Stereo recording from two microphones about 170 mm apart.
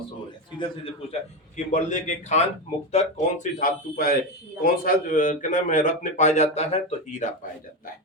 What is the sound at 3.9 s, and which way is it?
A man's voice, 60° left (ahead or behind).